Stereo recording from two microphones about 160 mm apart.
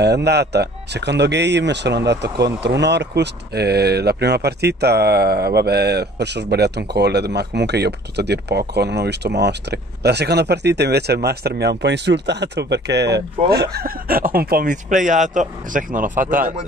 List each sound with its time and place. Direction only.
0.0 s speech: 90° right; by 16.5 s 55° right (ahead or behind)